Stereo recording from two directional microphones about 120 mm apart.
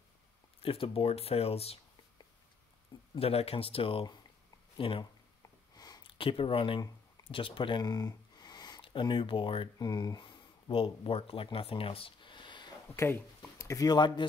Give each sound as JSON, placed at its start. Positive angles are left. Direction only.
{"t": 0.6, "sound": "speech", "side_deg": 50}
{"t": 3.2, "sound": "speech", "side_deg": 55}
{"t": 5.8, "sound": "a sound", "side_deg": 35}
{"t": 6.1, "sound": "speech", "side_deg": 50}
{"t": 7.2, "sound": "a sound", "side_deg": 45}
{"t": 8.8, "sound": "speech", "side_deg": 45}
{"t": 9.8, "sound": "speech", "side_deg": 35}
{"t": 12.9, "sound": "speech", "side_deg": 20}